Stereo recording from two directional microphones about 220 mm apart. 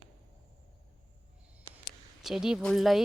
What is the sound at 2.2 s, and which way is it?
Speech, centre (ahead or behind).